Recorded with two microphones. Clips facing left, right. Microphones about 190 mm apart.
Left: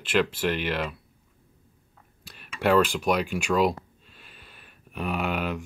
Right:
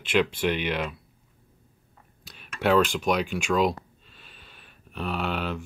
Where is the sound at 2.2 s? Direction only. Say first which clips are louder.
Even; 5° left (ahead or behind).